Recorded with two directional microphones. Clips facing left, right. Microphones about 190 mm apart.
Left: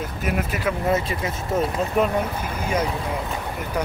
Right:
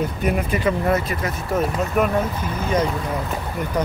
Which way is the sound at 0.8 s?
25° left (ahead or behind).